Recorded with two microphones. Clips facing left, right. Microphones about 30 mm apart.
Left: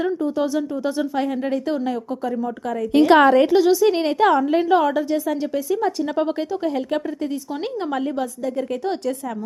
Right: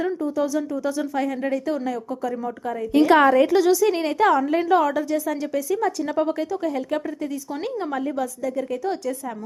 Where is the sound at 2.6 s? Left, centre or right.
Left.